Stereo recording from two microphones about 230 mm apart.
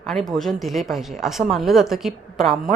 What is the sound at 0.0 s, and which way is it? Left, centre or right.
A woman's voice, centre.